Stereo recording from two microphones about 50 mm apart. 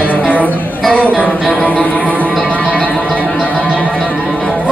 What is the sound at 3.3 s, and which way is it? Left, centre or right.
Music, centre.